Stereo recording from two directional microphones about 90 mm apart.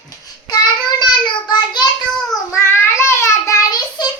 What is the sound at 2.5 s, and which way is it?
Child singing, 30° left (ahead or behind).